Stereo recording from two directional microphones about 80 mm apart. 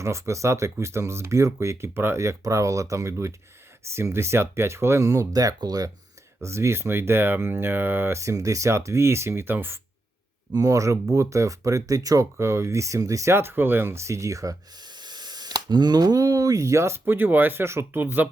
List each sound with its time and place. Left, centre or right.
0.0 s speech: right
6.4 s speech: right
10.5 s speech: right
13.3 s speech: right
14.8 s speech: right